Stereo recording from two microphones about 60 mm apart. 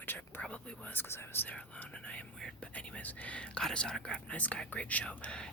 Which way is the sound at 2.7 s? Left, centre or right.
Left.